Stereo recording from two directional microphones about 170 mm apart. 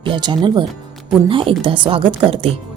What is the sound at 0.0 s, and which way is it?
A woman's voice, 30° right (ahead or behind).